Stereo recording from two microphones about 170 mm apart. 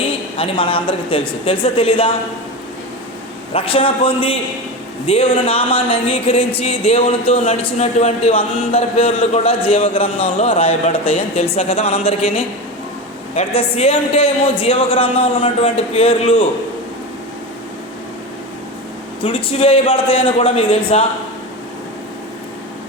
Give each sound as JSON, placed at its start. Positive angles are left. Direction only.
{"t": 0.3, "sound": "speech", "side_deg": 30}
{"t": 3.5, "sound": "speech", "side_deg": 30}
{"t": 13.3, "sound": "speech", "side_deg": 35}
{"t": 19.2, "sound": "speech", "side_deg": 30}